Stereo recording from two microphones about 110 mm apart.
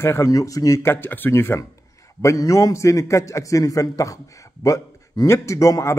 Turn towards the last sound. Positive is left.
turn(degrees=30)  # may be behind; listen again after turning